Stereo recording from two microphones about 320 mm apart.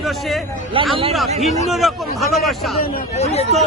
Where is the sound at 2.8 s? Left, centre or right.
Left.